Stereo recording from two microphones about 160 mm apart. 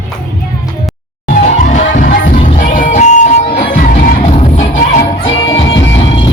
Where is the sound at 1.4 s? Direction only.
50° left (ahead or behind).